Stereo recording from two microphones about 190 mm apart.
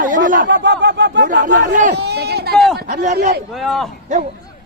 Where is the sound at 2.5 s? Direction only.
Centre (ahead or behind).